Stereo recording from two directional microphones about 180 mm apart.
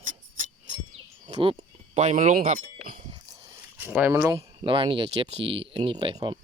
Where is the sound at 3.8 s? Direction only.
10° right (ahead or behind).